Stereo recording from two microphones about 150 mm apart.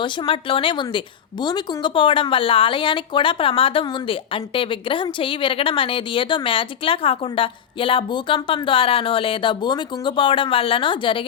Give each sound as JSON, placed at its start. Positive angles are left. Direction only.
{"t": 0.0, "sound": "a woman's voice", "side_deg": 35}